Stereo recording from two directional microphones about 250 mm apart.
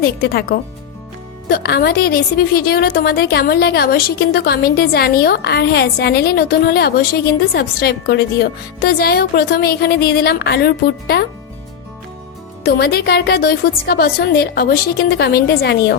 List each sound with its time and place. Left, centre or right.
0.2 s a woman's voice: left
12.6 s a woman's voice: left